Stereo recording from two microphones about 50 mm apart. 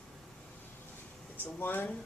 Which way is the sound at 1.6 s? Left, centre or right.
Left.